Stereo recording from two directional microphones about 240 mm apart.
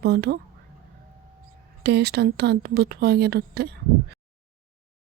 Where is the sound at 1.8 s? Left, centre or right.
Right.